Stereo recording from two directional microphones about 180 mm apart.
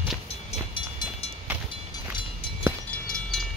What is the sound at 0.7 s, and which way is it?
Train, 30° left (ahead or behind).